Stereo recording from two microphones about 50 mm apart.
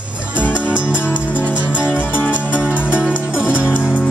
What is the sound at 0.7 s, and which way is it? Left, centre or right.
Music, right.